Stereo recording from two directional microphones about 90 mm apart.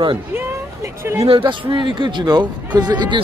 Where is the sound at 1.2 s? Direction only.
70° right (ahead or behind); by 3.2 s 55° right (ahead or behind).